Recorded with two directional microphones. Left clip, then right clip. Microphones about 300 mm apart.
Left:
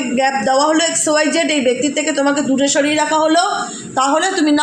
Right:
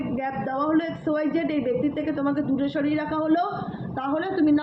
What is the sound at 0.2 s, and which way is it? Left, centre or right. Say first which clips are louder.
A woman's voice: left 14 dB; left.